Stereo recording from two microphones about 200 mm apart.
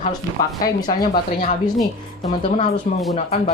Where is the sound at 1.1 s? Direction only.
45° left (ahead or behind).